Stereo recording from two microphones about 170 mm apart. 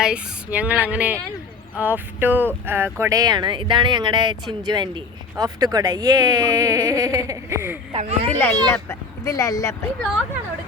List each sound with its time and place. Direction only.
0.0 s speech: 5° right (ahead or behind)
7.9 s a child's voice: 40° right (ahead or behind)
8.3 s speech: 15° left (ahead or behind)